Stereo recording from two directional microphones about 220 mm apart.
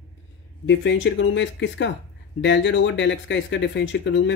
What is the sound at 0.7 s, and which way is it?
Speech, 55° left (ahead or behind).